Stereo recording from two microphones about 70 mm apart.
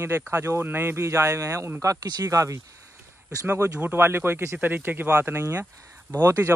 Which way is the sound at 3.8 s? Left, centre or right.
Right.